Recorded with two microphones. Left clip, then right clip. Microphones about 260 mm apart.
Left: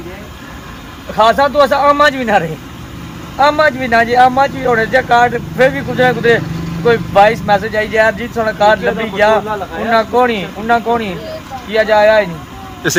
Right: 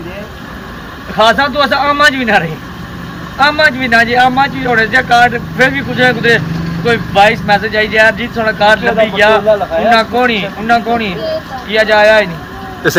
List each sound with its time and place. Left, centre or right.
1.2 s speech: centre